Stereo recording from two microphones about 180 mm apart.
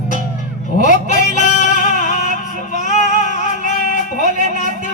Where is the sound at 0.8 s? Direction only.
45° left (ahead or behind).